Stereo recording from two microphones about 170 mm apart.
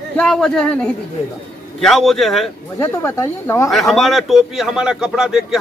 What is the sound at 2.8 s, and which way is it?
Speech, 15° left (ahead or behind).